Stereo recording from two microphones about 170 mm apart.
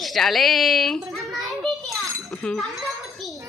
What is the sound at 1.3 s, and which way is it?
Children playing, centre (ahead or behind).